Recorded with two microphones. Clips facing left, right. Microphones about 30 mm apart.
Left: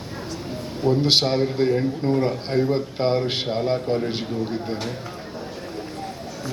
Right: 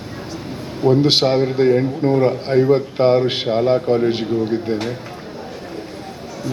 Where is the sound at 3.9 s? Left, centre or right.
Right.